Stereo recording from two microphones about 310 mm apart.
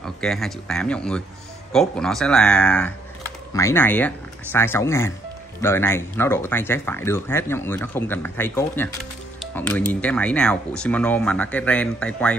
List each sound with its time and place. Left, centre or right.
0.0 s speech: centre